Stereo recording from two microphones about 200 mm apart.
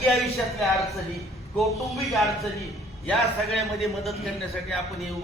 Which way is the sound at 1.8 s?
Centre (ahead or behind).